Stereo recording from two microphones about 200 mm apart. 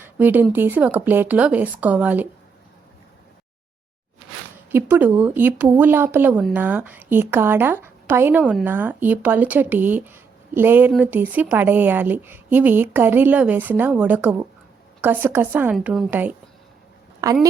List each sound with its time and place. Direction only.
0.2 s speech: 10° right (ahead or behind)
4.7 s speech: 10° right (ahead or behind)